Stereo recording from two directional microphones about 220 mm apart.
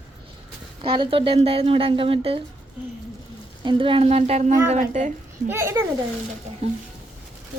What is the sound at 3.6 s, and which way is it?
Speech, 20° right (ahead or behind).